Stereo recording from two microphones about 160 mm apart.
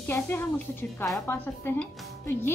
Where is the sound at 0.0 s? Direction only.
15° left (ahead or behind).